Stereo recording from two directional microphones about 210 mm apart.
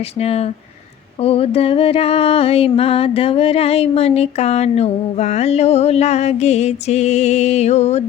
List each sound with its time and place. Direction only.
0.0 s speech: 30° left (ahead or behind)
1.2 s music: 30° left (ahead or behind)